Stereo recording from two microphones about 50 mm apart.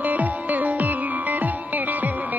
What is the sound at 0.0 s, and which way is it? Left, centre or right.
Music, right.